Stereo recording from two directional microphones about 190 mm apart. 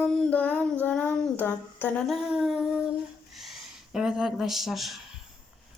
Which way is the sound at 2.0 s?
Centre (ahead or behind).